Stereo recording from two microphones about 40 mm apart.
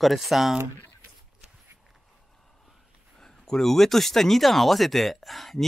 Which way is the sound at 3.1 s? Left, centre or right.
Centre.